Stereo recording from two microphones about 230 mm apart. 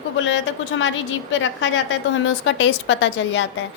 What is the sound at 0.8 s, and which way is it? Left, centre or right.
A woman's voice, left.